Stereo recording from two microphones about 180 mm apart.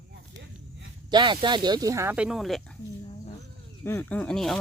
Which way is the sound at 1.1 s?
25° right (ahead or behind).